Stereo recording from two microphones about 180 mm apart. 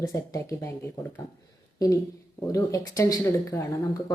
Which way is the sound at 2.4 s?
15° left (ahead or behind).